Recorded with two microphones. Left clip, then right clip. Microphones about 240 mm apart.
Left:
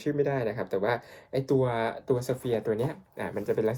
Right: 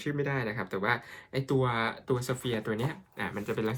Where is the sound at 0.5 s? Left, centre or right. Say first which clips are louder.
Left 2 dB; right.